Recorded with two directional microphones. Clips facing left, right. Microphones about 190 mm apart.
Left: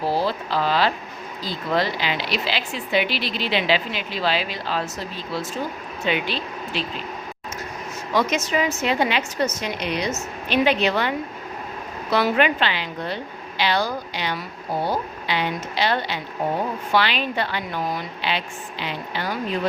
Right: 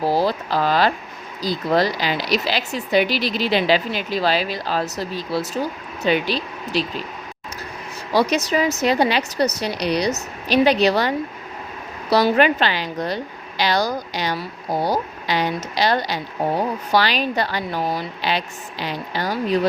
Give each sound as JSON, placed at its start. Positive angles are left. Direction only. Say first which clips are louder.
{"t": 0.0, "sound": "speech", "louder": "right 3 dB", "side_deg": -40}
{"t": 8.1, "sound": "speech", "louder": "right 3 dB", "side_deg": -35}
{"t": 12.1, "sound": "speech", "louder": "right 4 dB", "side_deg": -40}